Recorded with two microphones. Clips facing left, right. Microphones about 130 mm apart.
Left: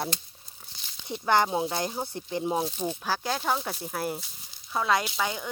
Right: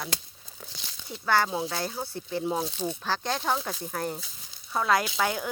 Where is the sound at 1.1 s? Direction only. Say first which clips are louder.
Left 2 dB; 20° left (ahead or behind).